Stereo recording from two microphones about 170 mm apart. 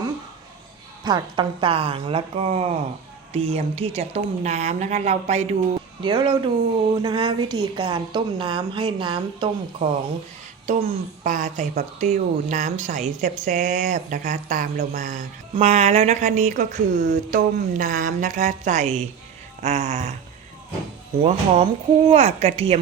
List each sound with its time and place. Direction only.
1.0 s a woman's voice: 25° right (ahead or behind); by 5.5 s 40° right (ahead or behind)
6.0 s a woman's voice: 25° right (ahead or behind)
10.7 s speech: 50° right (ahead or behind)
21.2 s a woman's voice: 35° right (ahead or behind)